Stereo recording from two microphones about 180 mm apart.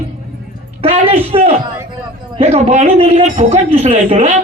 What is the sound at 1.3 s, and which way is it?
A man's voice, 35° right (ahead or behind).